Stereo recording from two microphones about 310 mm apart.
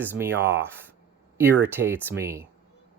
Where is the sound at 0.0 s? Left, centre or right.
Centre.